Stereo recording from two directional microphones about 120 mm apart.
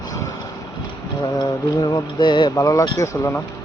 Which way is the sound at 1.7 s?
30° left (ahead or behind).